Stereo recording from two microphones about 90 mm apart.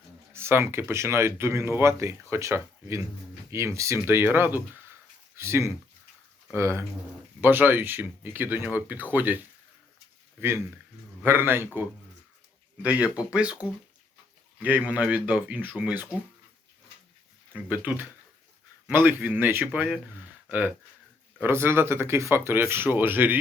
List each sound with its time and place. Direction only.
0.3 s speech: 25° right (ahead or behind)
12.8 s a man's voice: 15° right (ahead or behind)
17.5 s speech: 20° right (ahead or behind)